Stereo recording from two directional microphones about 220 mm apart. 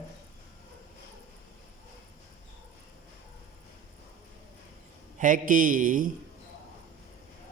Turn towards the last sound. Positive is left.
turn(degrees=-35)  # may be behind; listen again after turning